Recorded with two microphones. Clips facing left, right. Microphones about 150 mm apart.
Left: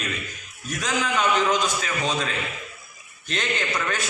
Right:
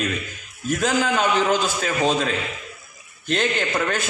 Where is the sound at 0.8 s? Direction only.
35° right (ahead or behind).